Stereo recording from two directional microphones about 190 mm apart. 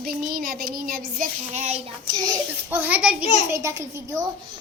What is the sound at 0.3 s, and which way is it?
Child singing, 50° right (ahead or behind).